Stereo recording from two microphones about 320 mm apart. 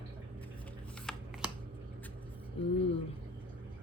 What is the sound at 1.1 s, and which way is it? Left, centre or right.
Shuffling cards, centre.